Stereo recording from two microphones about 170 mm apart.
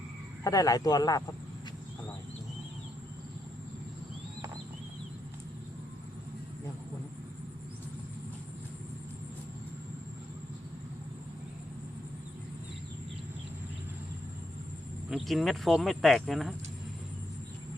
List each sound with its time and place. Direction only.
0.4 s speech: 20° left (ahead or behind)
15.1 s speech: centre (ahead or behind)